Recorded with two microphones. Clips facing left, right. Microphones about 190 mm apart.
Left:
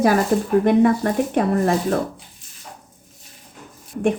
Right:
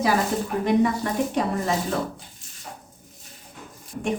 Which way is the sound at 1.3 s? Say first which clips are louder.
Left 6 dB; 55° left (ahead or behind).